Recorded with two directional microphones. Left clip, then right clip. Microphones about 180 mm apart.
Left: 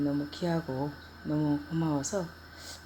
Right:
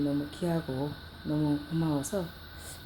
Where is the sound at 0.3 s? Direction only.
Centre (ahead or behind).